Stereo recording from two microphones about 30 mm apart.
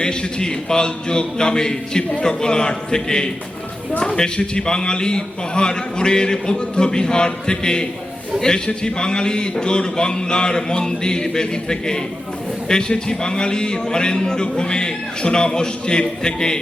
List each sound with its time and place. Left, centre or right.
0.0 s a man's voice: left